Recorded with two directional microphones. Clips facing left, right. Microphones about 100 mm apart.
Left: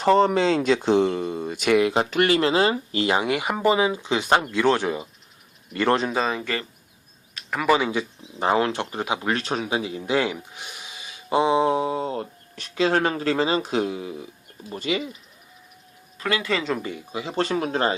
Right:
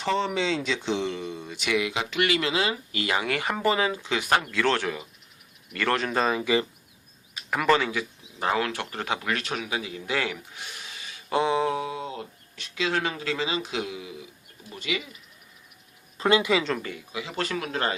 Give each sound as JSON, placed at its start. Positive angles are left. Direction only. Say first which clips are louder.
{"t": 0.0, "sound": "speech", "louder": "left 8 dB", "side_deg": 45}
{"t": 6.1, "sound": "speech", "louder": "even", "side_deg": 0}
{"t": 7.9, "sound": "speech", "louder": "left 4 dB", "side_deg": 25}
{"t": 9.2, "sound": "speech", "louder": "left 5 dB", "side_deg": 30}
{"t": 16.1, "sound": "speech", "louder": "right 4 dB", "side_deg": -25}
{"t": 17.1, "sound": "speech", "louder": "left 6 dB", "side_deg": 35}